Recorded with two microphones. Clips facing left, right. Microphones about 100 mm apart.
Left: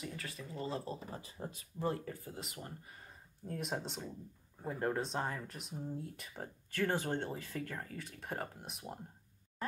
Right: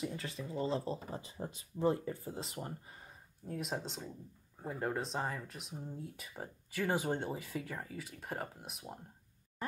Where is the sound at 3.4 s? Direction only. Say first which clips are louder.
Even; centre (ahead or behind).